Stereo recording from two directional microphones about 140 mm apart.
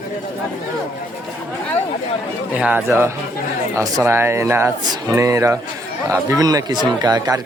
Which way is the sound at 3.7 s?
20° right (ahead or behind).